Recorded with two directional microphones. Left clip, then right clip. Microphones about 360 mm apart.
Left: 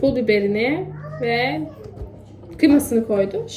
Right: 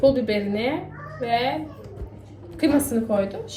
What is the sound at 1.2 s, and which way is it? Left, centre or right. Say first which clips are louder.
Speech: left 2 dB; right.